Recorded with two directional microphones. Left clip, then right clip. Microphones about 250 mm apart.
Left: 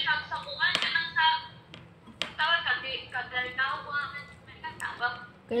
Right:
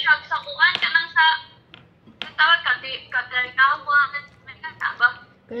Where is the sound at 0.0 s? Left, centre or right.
Right.